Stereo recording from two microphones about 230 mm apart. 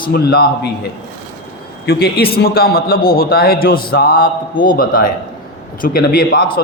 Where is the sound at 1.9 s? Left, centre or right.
Left.